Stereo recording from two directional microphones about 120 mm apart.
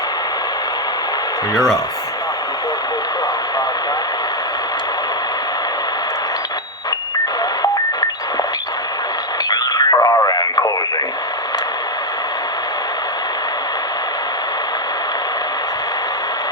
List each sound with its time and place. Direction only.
9.5 s radio: 35° left (ahead or behind)